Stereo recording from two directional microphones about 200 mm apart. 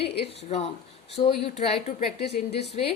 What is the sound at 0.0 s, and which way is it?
Speech, 30° left (ahead or behind).